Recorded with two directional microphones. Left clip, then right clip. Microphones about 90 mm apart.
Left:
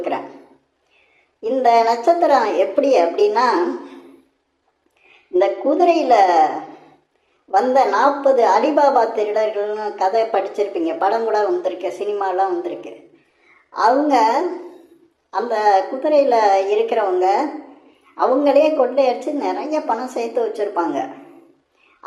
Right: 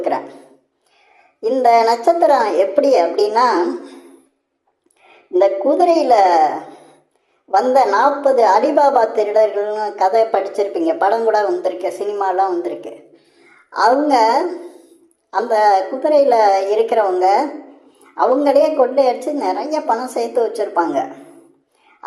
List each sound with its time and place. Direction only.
0.1 s a sound: 20° right (ahead or behind)
1.4 s a woman's voice: 20° right (ahead or behind)
5.3 s a woman's voice: 15° right (ahead or behind)